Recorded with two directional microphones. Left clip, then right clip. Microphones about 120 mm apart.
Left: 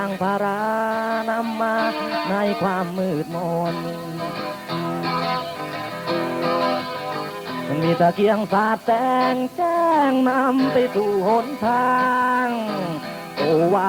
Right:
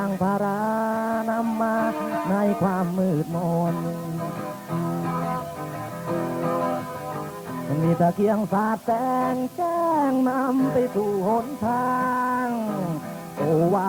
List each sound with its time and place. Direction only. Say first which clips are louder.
0.0 s mantra: left 3 dB; 30° left (ahead or behind)
3.3 s music: left 2 dB; 30° left (ahead or behind)